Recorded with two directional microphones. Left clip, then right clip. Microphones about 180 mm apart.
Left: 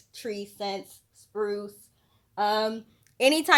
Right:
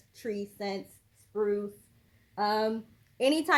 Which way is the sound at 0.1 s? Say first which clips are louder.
Left 1 dB; 25° left (ahead or behind).